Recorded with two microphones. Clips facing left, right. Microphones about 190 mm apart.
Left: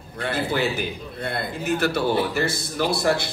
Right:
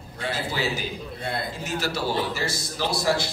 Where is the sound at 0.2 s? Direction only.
55° left (ahead or behind).